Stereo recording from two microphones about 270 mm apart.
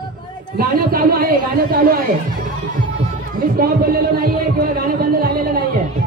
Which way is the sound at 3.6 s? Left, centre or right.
Right.